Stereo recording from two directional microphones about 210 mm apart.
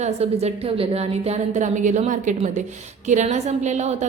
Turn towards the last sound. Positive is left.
turn(degrees=-35)  # may be behind; listen again after turning